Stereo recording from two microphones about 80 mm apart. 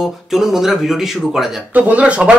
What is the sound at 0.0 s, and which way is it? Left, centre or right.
Speech, centre.